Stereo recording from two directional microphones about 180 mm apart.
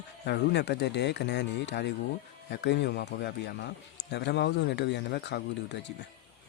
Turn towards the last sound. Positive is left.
turn(degrees=70)  # may be behind; listen again after turning